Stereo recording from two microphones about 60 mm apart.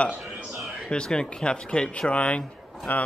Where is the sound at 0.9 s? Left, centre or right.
Centre.